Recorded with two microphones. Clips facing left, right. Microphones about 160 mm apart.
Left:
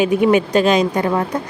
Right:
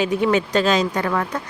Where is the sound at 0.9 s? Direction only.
25° left (ahead or behind).